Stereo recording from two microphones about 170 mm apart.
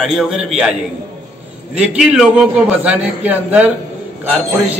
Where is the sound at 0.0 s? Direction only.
Centre (ahead or behind).